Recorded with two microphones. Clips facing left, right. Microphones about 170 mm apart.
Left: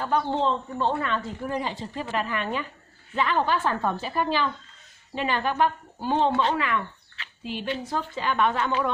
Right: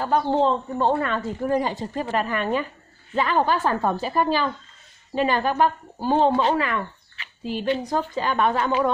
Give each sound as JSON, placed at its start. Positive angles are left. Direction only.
{"t": 0.0, "sound": "a woman's voice", "side_deg": -40}